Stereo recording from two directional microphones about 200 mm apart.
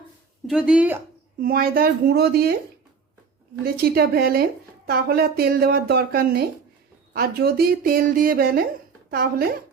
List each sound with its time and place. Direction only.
0.4 s speech: 5° right (ahead or behind)
1.4 s a woman's voice: 45° right (ahead or behind)
3.6 s a woman's voice: 50° right (ahead or behind)